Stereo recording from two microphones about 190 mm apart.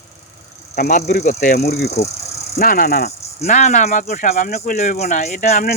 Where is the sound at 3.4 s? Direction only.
40° left (ahead or behind).